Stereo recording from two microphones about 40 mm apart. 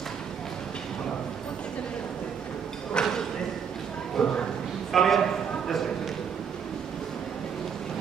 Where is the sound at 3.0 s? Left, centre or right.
Left.